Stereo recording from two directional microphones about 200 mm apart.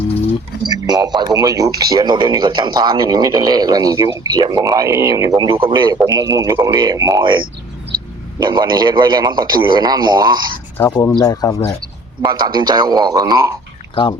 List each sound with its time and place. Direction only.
0.6 s speech: 20° right (ahead or behind)
10.8 s speech: 10° left (ahead or behind)
12.2 s speech: 20° right (ahead or behind)
13.9 s speech: 25° left (ahead or behind)